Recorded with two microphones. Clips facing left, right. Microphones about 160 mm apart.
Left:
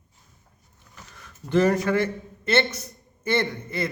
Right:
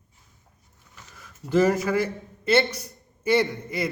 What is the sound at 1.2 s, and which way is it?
A man's voice, 5° right (ahead or behind).